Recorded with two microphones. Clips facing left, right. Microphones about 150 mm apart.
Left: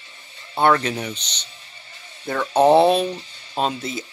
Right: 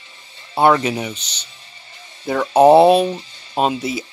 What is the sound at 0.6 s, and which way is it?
Speech, 10° right (ahead or behind).